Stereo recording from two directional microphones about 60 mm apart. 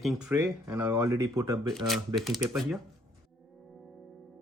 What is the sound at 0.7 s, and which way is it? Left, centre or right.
Speech, right.